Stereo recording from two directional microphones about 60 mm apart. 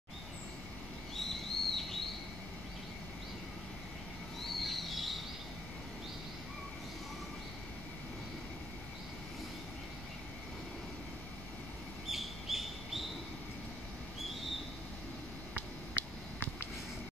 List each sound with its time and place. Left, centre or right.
1.1 s bird: centre
4.4 s a sound: centre
12.1 s bird: centre